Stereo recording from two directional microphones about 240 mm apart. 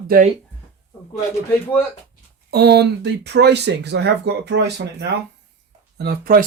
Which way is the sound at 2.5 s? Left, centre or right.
Right.